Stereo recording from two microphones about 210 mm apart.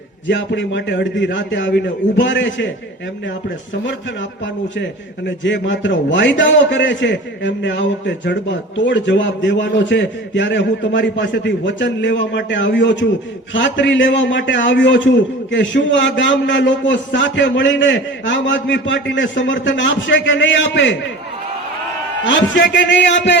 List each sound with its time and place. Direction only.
0.3 s a man's voice: 60° left (ahead or behind)
4.8 s a man's voice: 60° left (ahead or behind)
22.2 s a man's voice: 65° left (ahead or behind)